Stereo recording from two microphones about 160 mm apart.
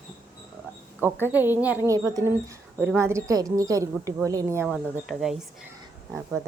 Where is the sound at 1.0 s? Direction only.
15° right (ahead or behind).